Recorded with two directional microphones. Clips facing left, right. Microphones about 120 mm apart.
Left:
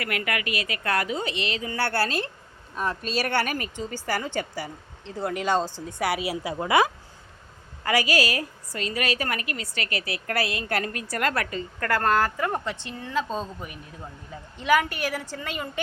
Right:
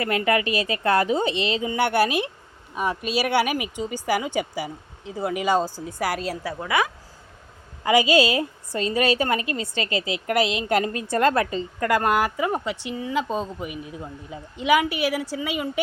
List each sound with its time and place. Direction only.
0.0 s a woman's voice: 25° right (ahead or behind); by 6.1 s centre (ahead or behind)
6.1 s a woman's voice: 10° left (ahead or behind)
7.9 s a woman's voice: 20° right (ahead or behind)